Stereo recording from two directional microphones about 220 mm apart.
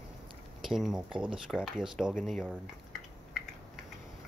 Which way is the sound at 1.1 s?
20° right (ahead or behind).